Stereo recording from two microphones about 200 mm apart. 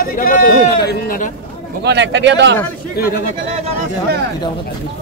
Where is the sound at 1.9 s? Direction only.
60° right (ahead or behind).